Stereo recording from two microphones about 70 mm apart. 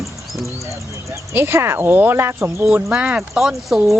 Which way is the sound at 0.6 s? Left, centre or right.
Right.